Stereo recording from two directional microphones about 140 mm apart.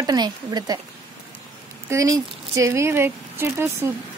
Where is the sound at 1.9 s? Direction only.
20° right (ahead or behind).